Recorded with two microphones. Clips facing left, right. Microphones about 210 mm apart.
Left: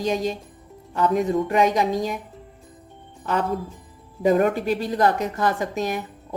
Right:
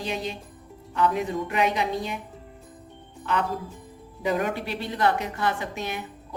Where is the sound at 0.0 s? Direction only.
45° left (ahead or behind).